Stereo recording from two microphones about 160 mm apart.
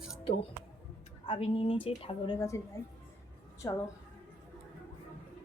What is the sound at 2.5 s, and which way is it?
Speech, 20° left (ahead or behind).